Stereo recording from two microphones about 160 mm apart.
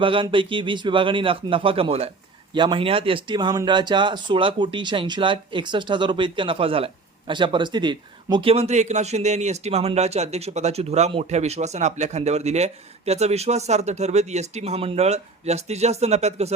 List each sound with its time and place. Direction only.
0.0 s speech: 30° right (ahead or behind)